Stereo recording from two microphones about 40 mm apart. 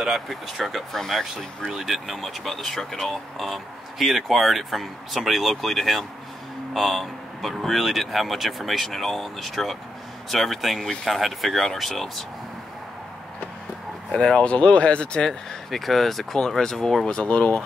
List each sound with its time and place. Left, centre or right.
0.0 s speech: centre
1.7 s speech: centre
14.1 s speech: centre
14.4 s speech: left
15.1 s speech: centre
17.0 s speech: left